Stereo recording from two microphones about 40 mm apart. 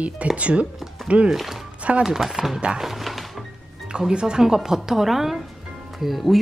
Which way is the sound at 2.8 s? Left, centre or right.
Centre.